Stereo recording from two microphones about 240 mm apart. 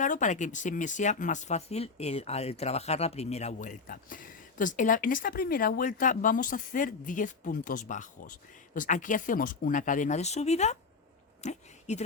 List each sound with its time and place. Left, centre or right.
0.0 s speech: left